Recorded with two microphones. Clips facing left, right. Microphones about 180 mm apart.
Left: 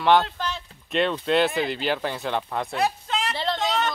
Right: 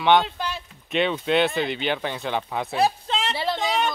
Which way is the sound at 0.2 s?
10° right (ahead or behind).